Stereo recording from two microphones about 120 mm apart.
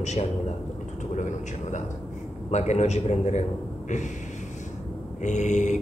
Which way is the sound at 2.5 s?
70° left (ahead or behind).